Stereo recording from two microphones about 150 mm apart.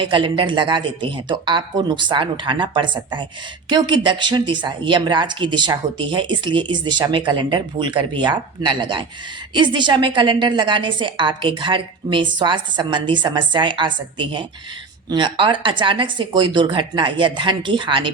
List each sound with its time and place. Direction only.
0.0 s a woman's voice: 35° right (ahead or behind)